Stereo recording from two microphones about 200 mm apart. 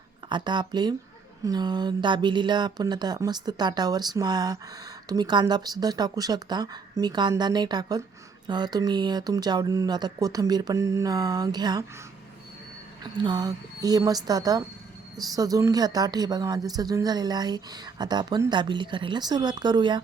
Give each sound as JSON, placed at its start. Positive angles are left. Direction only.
{"t": 0.3, "sound": "speech", "side_deg": -20}
{"t": 13.2, "sound": "speech", "side_deg": -20}